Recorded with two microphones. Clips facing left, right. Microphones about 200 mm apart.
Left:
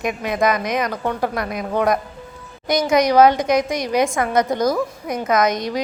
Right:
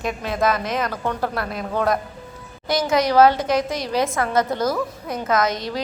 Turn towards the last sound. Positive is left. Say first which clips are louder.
# left 3 dB
turn(degrees=15)  # may be behind; listen again after turning